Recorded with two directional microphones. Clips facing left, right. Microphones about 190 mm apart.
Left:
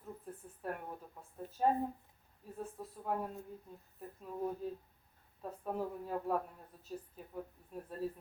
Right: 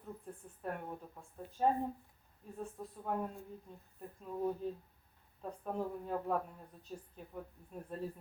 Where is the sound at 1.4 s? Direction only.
45° left (ahead or behind).